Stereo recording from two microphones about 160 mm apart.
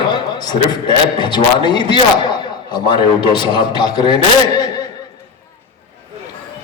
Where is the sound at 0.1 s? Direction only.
25° left (ahead or behind).